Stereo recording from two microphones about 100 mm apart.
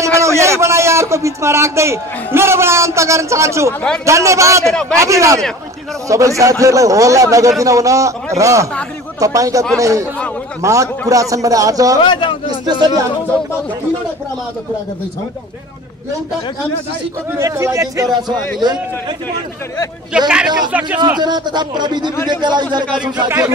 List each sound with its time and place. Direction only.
0.0 s a man's voice: 30° right (ahead or behind)
4.6 s a man's voice: 5° left (ahead or behind)
4.9 s a man's voice: 30° right (ahead or behind)
12.0 s a man's voice: 55° left (ahead or behind)
17.4 s a man's voice: 30° right (ahead or behind)
18.1 s speech: 45° right (ahead or behind)
20.1 s speech: 10° right (ahead or behind)
21.2 s speech: 45° right (ahead or behind)